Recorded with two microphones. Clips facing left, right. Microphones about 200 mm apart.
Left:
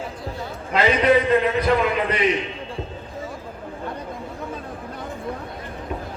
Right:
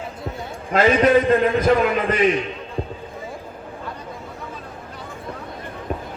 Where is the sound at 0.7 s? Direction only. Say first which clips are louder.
Right 2 dB; 45° right (ahead or behind).